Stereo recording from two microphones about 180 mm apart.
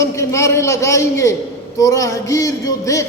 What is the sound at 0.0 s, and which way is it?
A man's voice, 15° left (ahead or behind).